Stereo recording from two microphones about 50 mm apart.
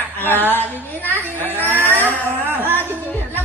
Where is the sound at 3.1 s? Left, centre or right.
Left.